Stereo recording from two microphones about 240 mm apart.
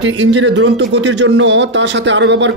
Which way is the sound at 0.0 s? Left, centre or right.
Right.